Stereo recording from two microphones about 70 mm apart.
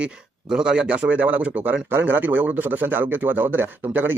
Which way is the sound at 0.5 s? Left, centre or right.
Centre.